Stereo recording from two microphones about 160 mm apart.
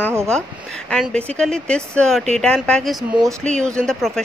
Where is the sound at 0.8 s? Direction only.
5° left (ahead or behind).